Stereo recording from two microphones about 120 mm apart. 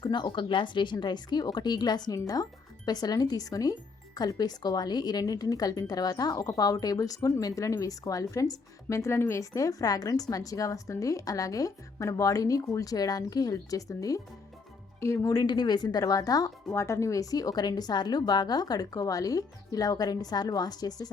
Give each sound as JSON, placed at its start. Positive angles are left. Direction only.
{"t": 0.0, "sound": "speech", "side_deg": 40}